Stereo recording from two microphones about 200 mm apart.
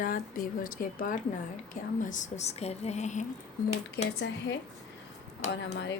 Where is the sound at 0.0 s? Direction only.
45° left (ahead or behind).